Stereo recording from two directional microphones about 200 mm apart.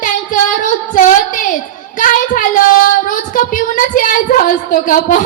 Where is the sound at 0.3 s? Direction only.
40° left (ahead or behind).